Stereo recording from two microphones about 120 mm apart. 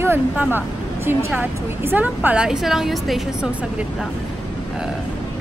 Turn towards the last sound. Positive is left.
turn(degrees=0)  # may be behind; listen again after turning